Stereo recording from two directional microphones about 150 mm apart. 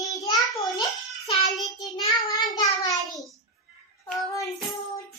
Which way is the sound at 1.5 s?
Centre (ahead or behind).